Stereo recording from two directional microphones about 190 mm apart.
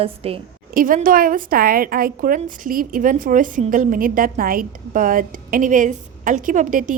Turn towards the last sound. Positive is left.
turn(degrees=-45)  # may be behind; listen again after turning